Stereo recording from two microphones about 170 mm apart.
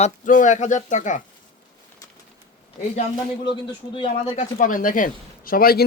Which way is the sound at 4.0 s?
35° left (ahead or behind).